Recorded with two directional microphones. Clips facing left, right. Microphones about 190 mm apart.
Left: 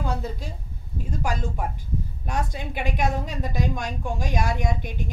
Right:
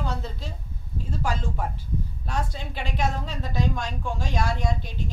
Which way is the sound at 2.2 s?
15° left (ahead or behind).